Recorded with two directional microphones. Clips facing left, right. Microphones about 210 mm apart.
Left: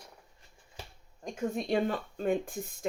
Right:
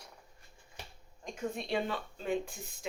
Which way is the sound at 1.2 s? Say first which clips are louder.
Left 5 dB; 45° left (ahead or behind).